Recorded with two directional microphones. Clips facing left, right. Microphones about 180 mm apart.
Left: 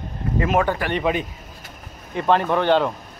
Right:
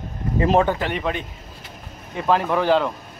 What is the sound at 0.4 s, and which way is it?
Speech, 30° right (ahead or behind).